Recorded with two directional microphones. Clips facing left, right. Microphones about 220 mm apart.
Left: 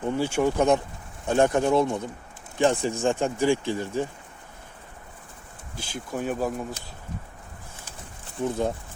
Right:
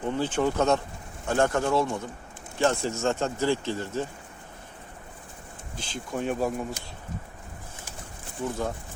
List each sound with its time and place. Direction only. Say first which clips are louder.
0.0 s speech: left 2 dB; 10° left (ahead or behind)
5.7 s speech: left 1 dB; 10° left (ahead or behind)